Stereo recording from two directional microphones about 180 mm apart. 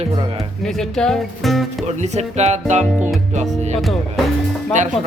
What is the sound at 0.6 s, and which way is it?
Speech, centre (ahead or behind).